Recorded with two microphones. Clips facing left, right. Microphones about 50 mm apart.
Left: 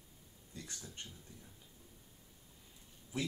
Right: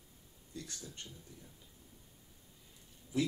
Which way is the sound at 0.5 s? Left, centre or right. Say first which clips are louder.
Right 3 dB; centre.